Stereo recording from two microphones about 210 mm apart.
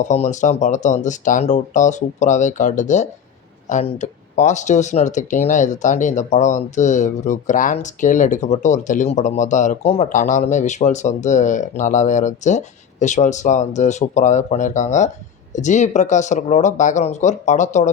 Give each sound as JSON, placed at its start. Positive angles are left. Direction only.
{"t": 0.0, "sound": "speech", "side_deg": 35}